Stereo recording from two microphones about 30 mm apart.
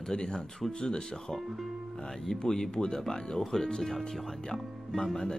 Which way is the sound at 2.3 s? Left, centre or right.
Centre.